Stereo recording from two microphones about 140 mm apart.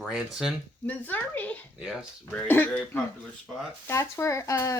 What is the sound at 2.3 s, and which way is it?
A woman's voice, 10° left (ahead or behind).